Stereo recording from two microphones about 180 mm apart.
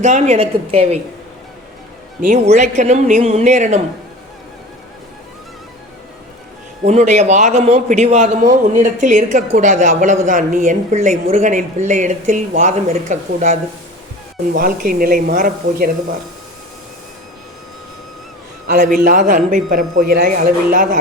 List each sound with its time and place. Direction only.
0.0 s speech: 40° right (ahead or behind)
2.2 s speech: 45° right (ahead or behind)
6.8 s speech: 40° right (ahead or behind)
18.7 s speech: 50° right (ahead or behind)